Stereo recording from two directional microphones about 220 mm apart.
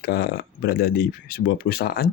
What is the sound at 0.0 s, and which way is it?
Speech, 45° left (ahead or behind).